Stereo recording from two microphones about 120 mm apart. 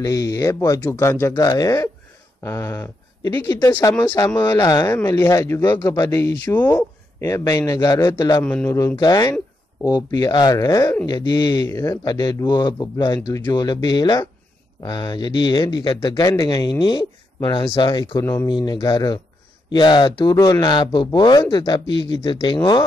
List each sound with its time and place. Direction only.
0.0 s a man's voice: 30° left (ahead or behind)
8.6 s a man's voice: 25° left (ahead or behind); by 18.2 s 40° left (ahead or behind)
18.2 s a man's voice: 20° left (ahead or behind)
18.5 s speech: 40° left (ahead or behind)
20.3 s speech: 30° left (ahead or behind)